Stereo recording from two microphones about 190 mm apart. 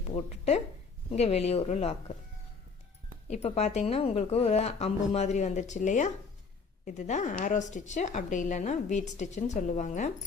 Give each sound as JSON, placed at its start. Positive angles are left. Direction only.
{"t": 0.1, "sound": "a woman's voice", "side_deg": 35}
{"t": 3.2, "sound": "a woman's voice", "side_deg": 35}